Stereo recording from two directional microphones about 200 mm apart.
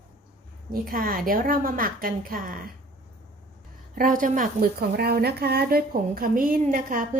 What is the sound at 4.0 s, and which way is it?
A woman's voice, 45° right (ahead or behind).